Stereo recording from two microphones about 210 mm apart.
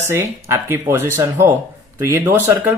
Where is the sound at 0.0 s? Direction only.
10° right (ahead or behind).